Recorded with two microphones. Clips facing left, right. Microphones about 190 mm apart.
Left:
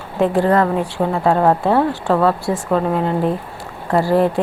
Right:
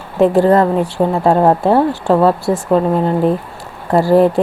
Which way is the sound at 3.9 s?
35° right (ahead or behind).